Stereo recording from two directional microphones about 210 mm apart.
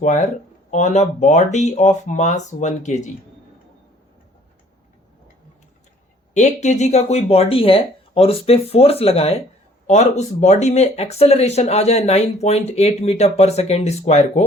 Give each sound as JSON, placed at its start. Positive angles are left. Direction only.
{"t": 0.0, "sound": "speech", "side_deg": 35}
{"t": 6.3, "sound": "speech", "side_deg": 35}